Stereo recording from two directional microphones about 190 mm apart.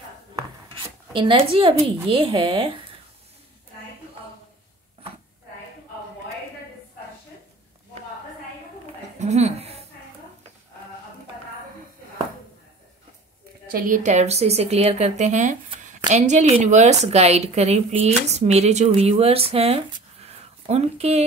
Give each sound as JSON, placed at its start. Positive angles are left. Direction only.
{"t": 1.1, "sound": "speech", "side_deg": -25}
{"t": 9.2, "sound": "a sound", "side_deg": -35}
{"t": 13.7, "sound": "a woman's voice", "side_deg": -45}